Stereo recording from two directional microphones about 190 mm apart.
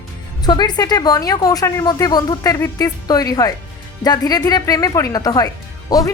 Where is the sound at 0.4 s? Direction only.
20° left (ahead or behind).